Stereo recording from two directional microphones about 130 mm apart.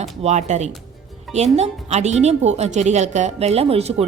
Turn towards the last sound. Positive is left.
turn(degrees=-50)  # may be behind; listen again after turning